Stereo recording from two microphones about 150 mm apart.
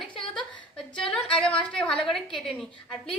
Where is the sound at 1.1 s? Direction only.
5° left (ahead or behind).